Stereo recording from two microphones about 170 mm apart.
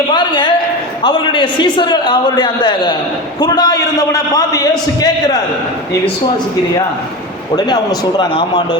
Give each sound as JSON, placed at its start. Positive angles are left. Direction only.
{"t": 0.1, "sound": "a sound", "side_deg": 25}
{"t": 1.0, "sound": "a man's voice", "side_deg": 25}
{"t": 7.5, "sound": "a man's voice", "side_deg": 25}